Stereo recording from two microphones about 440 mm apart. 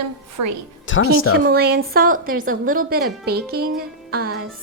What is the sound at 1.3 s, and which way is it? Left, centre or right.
A woman's voice, right.